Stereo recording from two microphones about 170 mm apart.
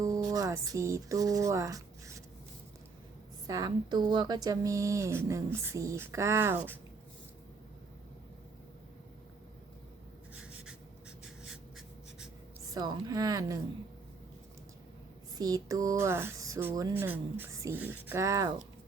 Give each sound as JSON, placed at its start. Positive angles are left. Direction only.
{"t": 0.0, "sound": "speech", "side_deg": -20}
{"t": 3.4, "sound": "speech", "side_deg": -20}
{"t": 10.3, "sound": "writing", "side_deg": -5}
{"t": 12.7, "sound": "speech", "side_deg": -20}
{"t": 15.4, "sound": "speech", "side_deg": -20}